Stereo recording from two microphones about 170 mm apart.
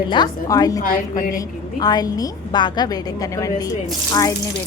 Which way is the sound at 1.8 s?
25° left (ahead or behind).